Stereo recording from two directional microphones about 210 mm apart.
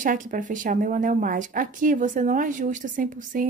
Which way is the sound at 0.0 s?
40° right (ahead or behind).